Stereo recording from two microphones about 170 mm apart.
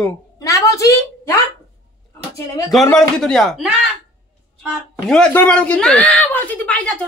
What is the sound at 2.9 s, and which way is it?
A man's voice, 5° left (ahead or behind).